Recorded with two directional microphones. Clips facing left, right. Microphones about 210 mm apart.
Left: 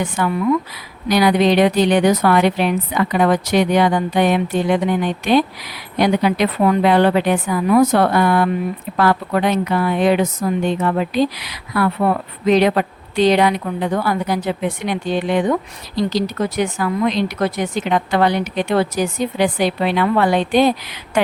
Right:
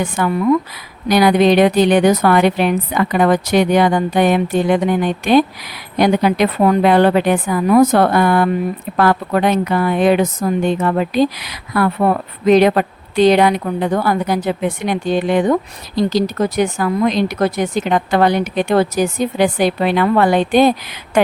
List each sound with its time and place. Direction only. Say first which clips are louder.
0.0 s a woman's voice: right 2 dB; 45° right (ahead or behind)